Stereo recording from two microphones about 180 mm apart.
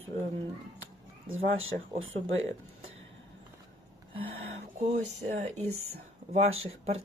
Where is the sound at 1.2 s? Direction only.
90° right.